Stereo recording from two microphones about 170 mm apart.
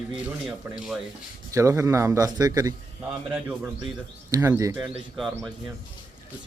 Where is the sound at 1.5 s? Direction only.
15° right (ahead or behind).